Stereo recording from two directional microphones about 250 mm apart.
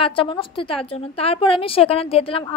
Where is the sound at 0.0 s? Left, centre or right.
Left.